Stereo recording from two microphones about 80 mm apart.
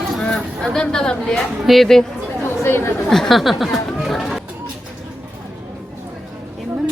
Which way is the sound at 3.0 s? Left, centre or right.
Centre.